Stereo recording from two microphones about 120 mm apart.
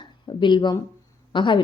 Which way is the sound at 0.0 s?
40° left (ahead or behind).